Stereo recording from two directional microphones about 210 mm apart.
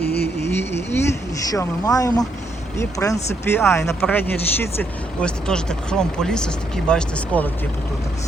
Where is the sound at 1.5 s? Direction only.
15° left (ahead or behind).